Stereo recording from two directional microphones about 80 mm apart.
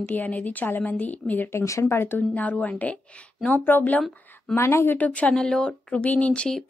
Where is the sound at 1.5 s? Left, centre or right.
Left.